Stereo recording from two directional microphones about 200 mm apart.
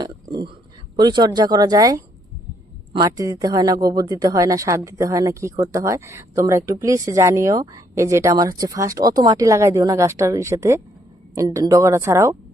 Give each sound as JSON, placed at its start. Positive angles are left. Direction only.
{"t": 0.9, "sound": "a man's voice", "side_deg": -20}